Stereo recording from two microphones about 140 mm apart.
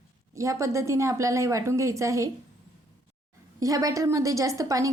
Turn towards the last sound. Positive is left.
turn(degrees=-25)  # may be behind; listen again after turning